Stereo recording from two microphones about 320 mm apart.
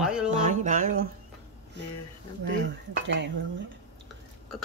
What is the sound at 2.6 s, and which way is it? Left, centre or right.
Speech, right.